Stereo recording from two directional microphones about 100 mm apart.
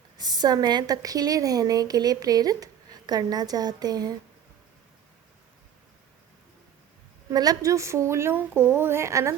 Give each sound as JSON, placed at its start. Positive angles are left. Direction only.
{"t": 0.2, "sound": "a woman's voice", "side_deg": -45}
{"t": 7.3, "sound": "speech", "side_deg": -35}